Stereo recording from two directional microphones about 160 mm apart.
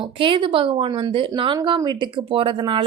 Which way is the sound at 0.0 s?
30° right (ahead or behind).